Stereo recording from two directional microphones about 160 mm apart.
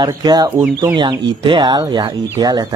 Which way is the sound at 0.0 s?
25° right (ahead or behind).